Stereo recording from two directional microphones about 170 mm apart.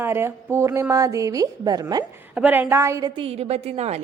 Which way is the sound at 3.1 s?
35° right (ahead or behind).